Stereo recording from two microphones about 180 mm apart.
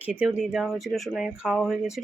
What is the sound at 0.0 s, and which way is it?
Speech, 5° right (ahead or behind).